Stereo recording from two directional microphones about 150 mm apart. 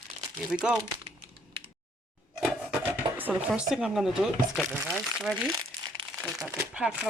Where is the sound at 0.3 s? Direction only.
5° right (ahead or behind).